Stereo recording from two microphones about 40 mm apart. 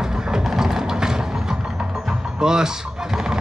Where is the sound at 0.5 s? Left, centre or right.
Centre.